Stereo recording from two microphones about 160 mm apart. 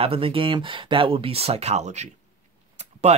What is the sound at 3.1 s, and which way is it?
Speech, 45° right (ahead or behind).